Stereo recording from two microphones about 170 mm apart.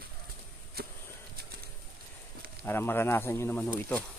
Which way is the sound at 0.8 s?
65° right (ahead or behind).